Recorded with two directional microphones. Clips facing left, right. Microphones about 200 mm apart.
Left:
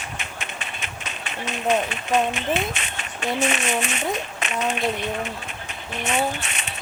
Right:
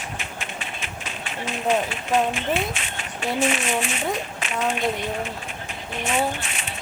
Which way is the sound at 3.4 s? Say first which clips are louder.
Right 1 dB; 70° left (ahead or behind).